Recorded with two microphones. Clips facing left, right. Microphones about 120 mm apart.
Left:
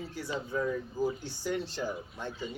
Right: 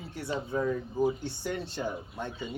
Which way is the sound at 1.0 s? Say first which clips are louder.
Right 4 dB; 60° right (ahead or behind).